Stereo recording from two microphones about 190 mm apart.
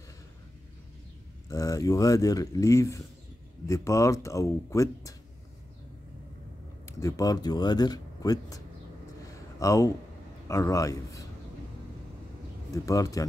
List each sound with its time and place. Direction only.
1.5 s speech: 15° left (ahead or behind)
6.9 s speech: 15° left (ahead or behind)
9.3 s a sound: 15° left (ahead or behind)
10.5 s speech: 15° left (ahead or behind)
12.7 s speech: 15° left (ahead or behind)